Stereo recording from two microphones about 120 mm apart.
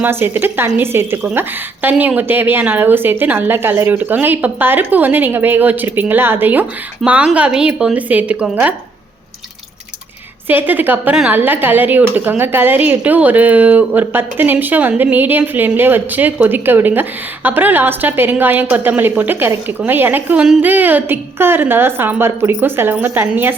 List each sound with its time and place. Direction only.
0.0 s a woman's voice: 15° right (ahead or behind)
10.5 s a woman's voice: 15° right (ahead or behind)